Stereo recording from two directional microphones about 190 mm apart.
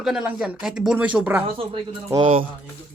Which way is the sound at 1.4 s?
30° right (ahead or behind).